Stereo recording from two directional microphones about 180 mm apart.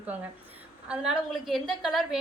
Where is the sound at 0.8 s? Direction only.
5° right (ahead or behind).